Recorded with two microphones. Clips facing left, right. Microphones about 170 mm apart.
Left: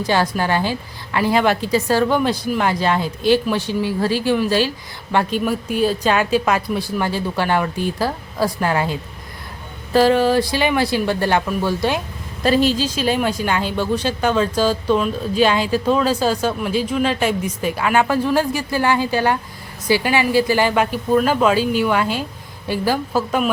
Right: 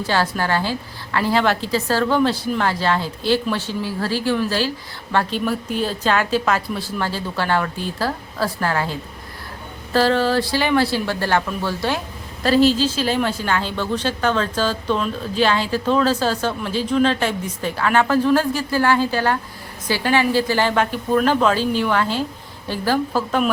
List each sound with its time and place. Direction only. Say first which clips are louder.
0.0 s a woman's voice: left 2 dB; 15° left (ahead or behind)